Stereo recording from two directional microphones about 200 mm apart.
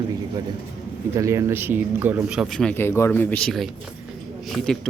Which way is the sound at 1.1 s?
15° right (ahead or behind).